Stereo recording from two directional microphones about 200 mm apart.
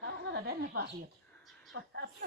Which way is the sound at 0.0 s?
55° right (ahead or behind).